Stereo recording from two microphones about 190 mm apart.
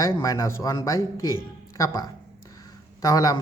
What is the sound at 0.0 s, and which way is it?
Speech, 15° left (ahead or behind).